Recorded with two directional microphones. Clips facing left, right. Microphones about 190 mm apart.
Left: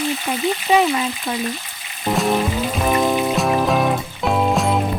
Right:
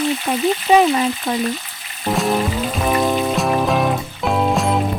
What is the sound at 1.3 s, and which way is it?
Speech, 55° right (ahead or behind).